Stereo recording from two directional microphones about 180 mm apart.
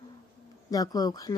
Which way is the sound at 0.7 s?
20° left (ahead or behind).